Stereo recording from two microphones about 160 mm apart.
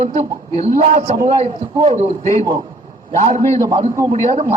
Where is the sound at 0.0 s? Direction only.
40° right (ahead or behind).